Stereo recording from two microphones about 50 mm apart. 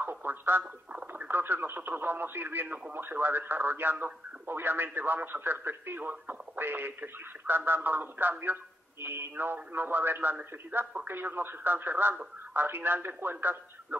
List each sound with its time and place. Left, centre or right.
0.0 s speech: right